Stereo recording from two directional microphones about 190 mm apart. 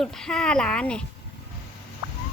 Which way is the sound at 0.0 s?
5° left (ahead or behind).